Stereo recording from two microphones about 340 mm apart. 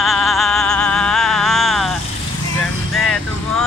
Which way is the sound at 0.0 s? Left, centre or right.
Centre.